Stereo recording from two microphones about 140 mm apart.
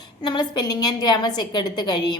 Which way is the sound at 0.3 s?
30° left (ahead or behind).